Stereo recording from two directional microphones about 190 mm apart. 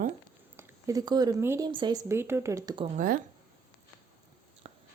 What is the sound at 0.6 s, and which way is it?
Speech, 15° right (ahead or behind).